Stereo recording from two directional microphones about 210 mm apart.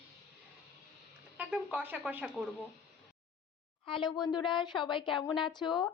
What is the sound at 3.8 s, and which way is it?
A woman's voice, 25° left (ahead or behind).